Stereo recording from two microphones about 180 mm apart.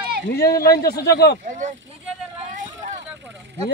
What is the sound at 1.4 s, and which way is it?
Speech, 45° right (ahead or behind).